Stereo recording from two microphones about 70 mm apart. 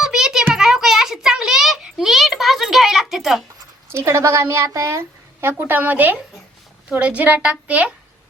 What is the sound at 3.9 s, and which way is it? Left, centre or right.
A woman's voice, right.